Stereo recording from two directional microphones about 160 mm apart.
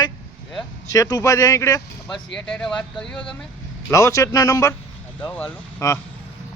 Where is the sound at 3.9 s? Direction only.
20° left (ahead or behind).